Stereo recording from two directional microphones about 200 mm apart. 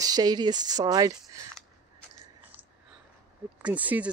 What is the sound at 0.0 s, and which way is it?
Speech, 20° right (ahead or behind).